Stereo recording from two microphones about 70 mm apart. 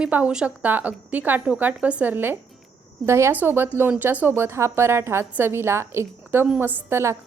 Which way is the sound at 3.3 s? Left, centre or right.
Right.